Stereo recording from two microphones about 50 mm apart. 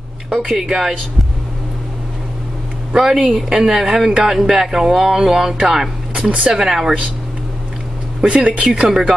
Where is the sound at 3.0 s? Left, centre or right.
Centre.